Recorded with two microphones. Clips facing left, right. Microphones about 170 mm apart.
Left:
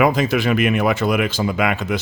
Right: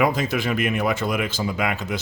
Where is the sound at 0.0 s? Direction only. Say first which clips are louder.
Left 5 dB; 80° left.